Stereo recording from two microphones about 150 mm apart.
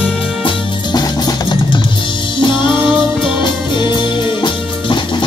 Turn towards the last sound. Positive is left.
turn(degrees=30)  # may be behind; listen again after turning